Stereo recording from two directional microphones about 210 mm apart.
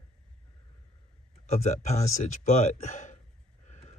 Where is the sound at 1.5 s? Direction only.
30° left (ahead or behind).